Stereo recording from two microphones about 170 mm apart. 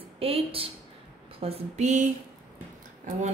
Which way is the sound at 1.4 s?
40° right (ahead or behind).